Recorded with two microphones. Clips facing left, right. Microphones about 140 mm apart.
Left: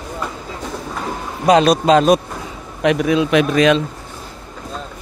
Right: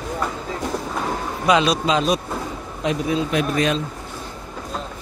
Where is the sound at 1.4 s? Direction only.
45° left (ahead or behind).